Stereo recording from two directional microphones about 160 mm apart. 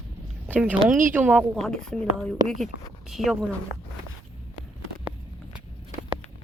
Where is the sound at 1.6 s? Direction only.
5° left (ahead or behind).